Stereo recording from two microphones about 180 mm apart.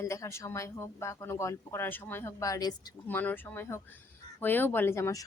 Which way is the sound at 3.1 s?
10° left (ahead or behind).